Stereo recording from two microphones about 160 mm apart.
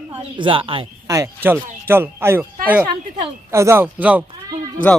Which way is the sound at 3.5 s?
15° right (ahead or behind).